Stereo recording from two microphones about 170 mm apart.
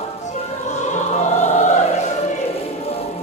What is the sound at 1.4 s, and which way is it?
Choir, 45° left (ahead or behind).